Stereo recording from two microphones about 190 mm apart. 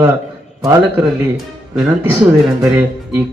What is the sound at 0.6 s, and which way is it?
Speech, 10° right (ahead or behind).